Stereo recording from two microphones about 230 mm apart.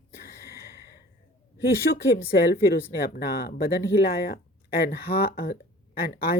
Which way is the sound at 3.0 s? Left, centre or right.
Left.